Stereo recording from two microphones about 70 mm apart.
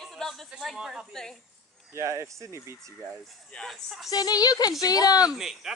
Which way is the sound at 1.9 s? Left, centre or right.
Right.